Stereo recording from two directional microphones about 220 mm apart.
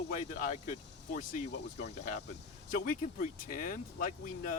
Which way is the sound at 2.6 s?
40° left (ahead or behind).